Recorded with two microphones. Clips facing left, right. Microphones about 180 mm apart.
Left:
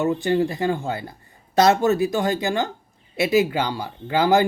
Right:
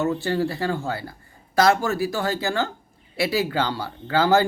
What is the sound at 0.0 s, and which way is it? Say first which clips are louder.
A man's voice: left 3 dB; 15° left (ahead or behind).